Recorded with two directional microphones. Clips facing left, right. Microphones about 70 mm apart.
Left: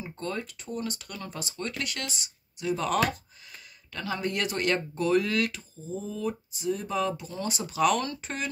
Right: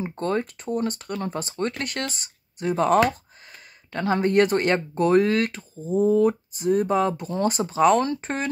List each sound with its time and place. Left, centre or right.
0.0 s speech: right
5.8 s speech: right